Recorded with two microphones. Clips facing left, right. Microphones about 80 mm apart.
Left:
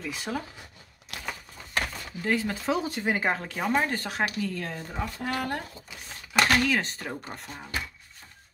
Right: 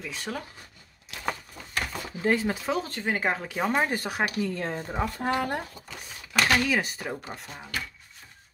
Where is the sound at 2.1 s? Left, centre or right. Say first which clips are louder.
Right 3 dB; right.